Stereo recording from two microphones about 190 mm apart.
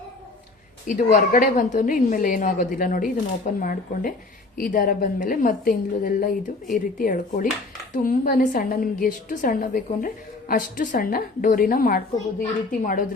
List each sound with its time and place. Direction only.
0.9 s a woman's voice: 45° left (ahead or behind)